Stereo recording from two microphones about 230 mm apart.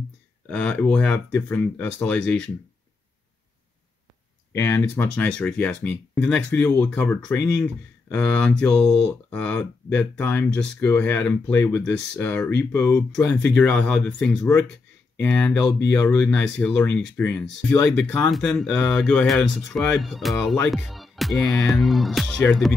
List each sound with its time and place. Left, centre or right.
0.5 s speech: centre
4.5 s speech: centre